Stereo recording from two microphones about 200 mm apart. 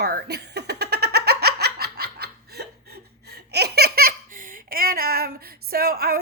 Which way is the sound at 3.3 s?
55° right (ahead or behind).